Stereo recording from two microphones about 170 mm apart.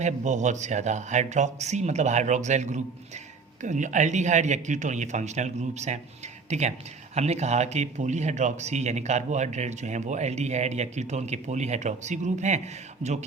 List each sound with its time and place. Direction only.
0.0 s speech: 45° right (ahead or behind)